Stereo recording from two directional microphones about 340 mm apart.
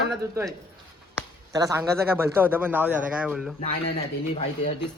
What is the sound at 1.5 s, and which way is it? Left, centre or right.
A man's voice, centre.